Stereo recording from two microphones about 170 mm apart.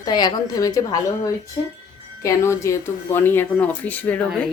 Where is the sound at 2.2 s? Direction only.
15° left (ahead or behind).